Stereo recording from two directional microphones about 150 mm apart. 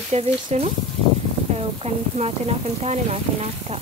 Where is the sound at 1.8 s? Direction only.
45° right (ahead or behind).